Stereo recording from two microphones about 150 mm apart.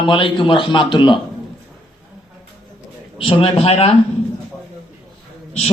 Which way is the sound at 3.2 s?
35° left (ahead or behind).